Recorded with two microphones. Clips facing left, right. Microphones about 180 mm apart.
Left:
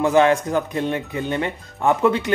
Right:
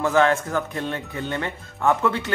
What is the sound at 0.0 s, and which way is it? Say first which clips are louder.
Speech: left 3 dB; 15° left (ahead or behind).